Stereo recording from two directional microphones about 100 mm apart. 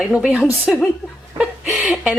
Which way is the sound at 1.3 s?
10° right (ahead or behind).